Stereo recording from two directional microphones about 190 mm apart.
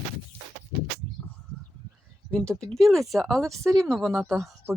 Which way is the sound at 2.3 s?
5° left (ahead or behind).